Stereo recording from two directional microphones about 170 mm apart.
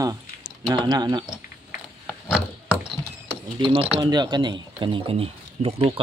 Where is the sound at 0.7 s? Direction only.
25° right (ahead or behind).